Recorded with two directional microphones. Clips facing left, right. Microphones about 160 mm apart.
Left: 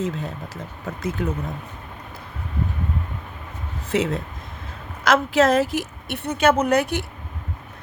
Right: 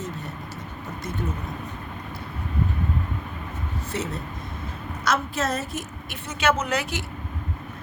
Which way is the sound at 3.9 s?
90° left.